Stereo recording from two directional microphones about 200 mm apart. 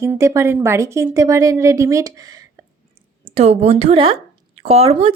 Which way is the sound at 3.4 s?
30° right (ahead or behind).